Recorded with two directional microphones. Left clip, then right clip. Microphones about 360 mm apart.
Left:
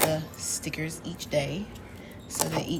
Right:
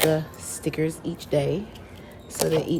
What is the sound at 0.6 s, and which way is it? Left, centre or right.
Speech, right.